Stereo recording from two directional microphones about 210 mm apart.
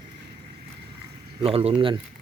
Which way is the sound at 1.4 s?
25° right (ahead or behind).